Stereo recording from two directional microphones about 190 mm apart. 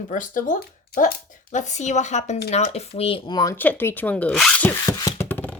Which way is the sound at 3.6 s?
10° left (ahead or behind).